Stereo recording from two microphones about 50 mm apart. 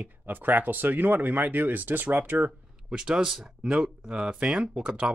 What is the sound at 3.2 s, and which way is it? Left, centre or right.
Speech, centre.